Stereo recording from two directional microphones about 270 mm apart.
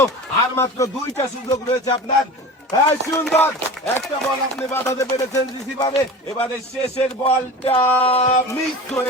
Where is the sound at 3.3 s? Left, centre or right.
Centre.